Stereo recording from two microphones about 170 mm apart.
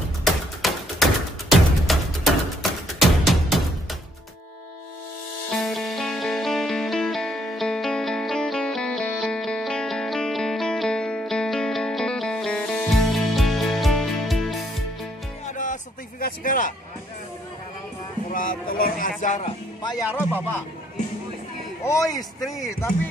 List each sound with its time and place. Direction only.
0.2 s tap: centre (ahead or behind)
1.9 s music: centre (ahead or behind)
5.5 s music: centre (ahead or behind)
15.4 s music: 50° left (ahead or behind)
18.3 s a sound: 55° left (ahead or behind)
19.8 s music: 25° left (ahead or behind)
21.8 s speech: 20° left (ahead or behind)
22.4 s speech: centre (ahead or behind)